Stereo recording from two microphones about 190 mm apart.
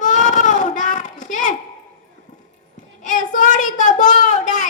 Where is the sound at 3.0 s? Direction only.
45° left (ahead or behind).